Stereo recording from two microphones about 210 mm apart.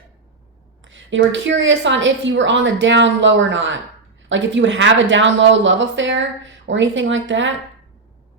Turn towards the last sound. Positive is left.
turn(degrees=-60)  # may be behind; listen again after turning